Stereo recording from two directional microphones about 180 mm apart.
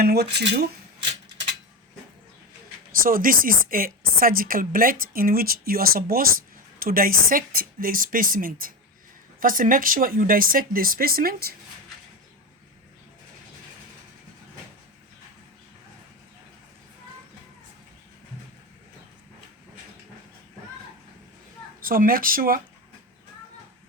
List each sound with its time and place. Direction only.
0.0 s speech: 60° right (ahead or behind)
3.0 s a woman's voice: 50° right (ahead or behind)
21.8 s a woman's voice: 50° right (ahead or behind)